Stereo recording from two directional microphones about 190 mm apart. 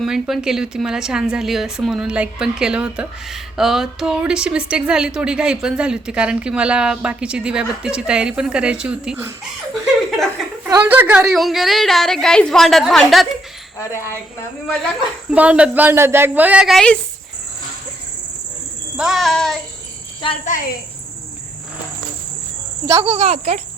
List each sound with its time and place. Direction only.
0.0 s a woman's voice: centre (ahead or behind)
10.7 s a woman's voice: 10° right (ahead or behind)
13.7 s a woman's voice: 15° left (ahead or behind)
15.3 s a woman's voice: 5° right (ahead or behind)
18.9 s a woman's voice: centre (ahead or behind)
20.4 s a woman's voice: 45° left (ahead or behind)
23.0 s speech: 30° right (ahead or behind)